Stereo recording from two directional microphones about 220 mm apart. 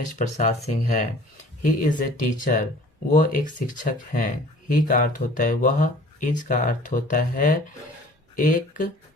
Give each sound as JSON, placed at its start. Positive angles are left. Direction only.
{"t": 0.2, "sound": "speech", "side_deg": 30}